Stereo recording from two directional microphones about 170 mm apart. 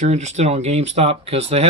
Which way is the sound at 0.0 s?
40° right (ahead or behind).